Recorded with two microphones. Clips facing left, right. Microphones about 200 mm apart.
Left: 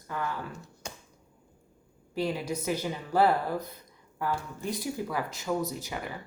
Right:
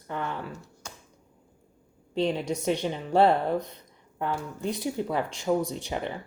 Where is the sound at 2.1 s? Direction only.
25° right (ahead or behind).